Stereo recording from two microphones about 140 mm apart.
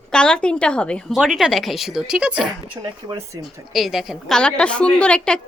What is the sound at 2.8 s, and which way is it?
Speech, 25° right (ahead or behind).